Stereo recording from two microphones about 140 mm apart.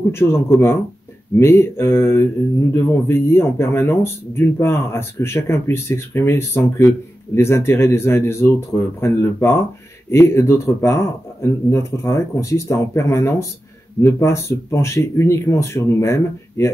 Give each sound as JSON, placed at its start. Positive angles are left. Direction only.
{"t": 0.1, "sound": "speech", "side_deg": 15}